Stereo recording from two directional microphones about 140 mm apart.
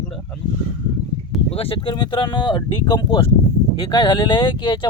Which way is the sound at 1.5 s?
40° left (ahead or behind).